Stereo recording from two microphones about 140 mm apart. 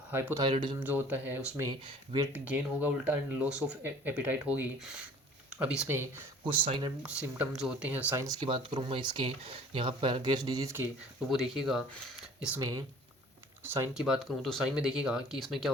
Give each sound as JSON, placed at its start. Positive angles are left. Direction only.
{"t": 0.1, "sound": "speech", "side_deg": -15}
{"t": 0.3, "sound": "speech", "side_deg": -35}
{"t": 0.8, "sound": "speech", "side_deg": -15}
{"t": 6.5, "sound": "speech", "side_deg": -35}
{"t": 7.0, "sound": "speech", "side_deg": -5}
{"t": 8.2, "sound": "speech", "side_deg": -25}
{"t": 8.4, "sound": "speech", "side_deg": -40}
{"t": 11.3, "sound": "speech", "side_deg": -5}
{"t": 12.5, "sound": "speech", "side_deg": -25}
{"t": 13.9, "sound": "speech", "side_deg": -5}